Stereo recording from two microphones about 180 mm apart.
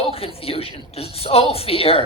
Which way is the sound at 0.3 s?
30° left (ahead or behind).